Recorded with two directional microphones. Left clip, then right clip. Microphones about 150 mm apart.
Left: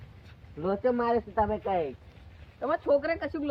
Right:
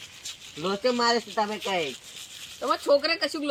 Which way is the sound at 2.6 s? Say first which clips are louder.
Right 3 dB; 10° right (ahead or behind).